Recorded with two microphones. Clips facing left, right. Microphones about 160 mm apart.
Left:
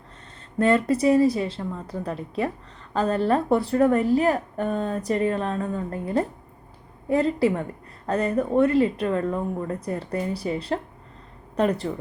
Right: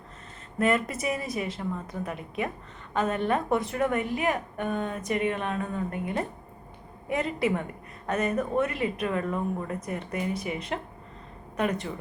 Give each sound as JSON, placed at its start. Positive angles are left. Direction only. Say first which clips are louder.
{"t": 0.6, "sound": "a woman's voice", "louder": "left 6 dB", "side_deg": 30}